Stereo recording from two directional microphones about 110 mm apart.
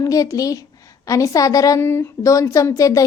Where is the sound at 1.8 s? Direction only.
25° left (ahead or behind).